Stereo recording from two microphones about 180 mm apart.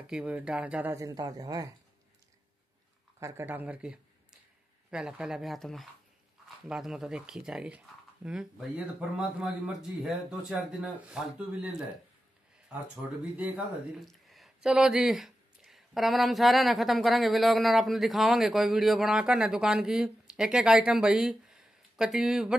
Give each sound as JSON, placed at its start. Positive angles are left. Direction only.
{"t": 0.0, "sound": "speech", "side_deg": -5}
{"t": 1.0, "sound": "speech", "side_deg": -20}
{"t": 3.2, "sound": "speech", "side_deg": -15}
{"t": 13.9, "sound": "speech", "side_deg": 0}